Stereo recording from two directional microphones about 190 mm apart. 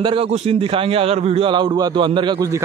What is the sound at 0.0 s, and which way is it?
A man's voice, 30° right (ahead or behind).